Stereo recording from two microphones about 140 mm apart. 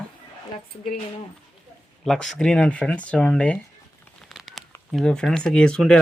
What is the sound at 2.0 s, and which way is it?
Speech, 5° left (ahead or behind).